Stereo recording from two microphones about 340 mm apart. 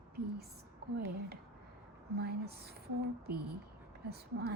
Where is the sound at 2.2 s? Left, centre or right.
Right.